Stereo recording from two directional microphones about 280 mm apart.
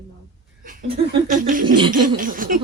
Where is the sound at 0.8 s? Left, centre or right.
Right.